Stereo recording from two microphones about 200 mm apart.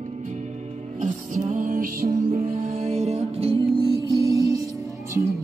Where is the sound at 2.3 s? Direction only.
30° right (ahead or behind).